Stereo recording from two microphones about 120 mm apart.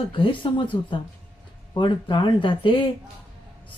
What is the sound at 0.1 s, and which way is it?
Speech, 40° left (ahead or behind).